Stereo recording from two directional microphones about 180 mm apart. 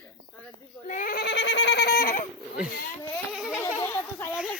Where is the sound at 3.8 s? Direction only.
15° left (ahead or behind).